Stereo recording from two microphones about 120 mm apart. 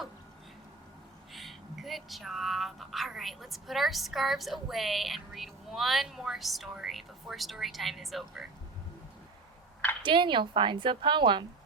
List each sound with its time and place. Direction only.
1.3 s speech: centre (ahead or behind)
10.0 s speech: 40° right (ahead or behind)